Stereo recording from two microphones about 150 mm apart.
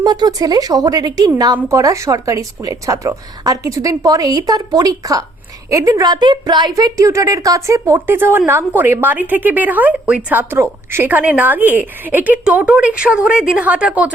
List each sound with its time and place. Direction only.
0.0 s a woman's voice: 25° right (ahead or behind); by 14.1 s 10° right (ahead or behind)